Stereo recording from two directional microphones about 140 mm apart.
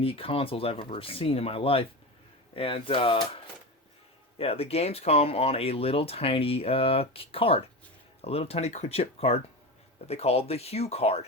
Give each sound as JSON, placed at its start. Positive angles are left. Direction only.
{"t": 0.0, "sound": "speech", "side_deg": 40}